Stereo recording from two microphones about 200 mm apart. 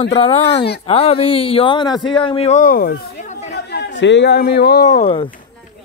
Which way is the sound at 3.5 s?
60° left (ahead or behind).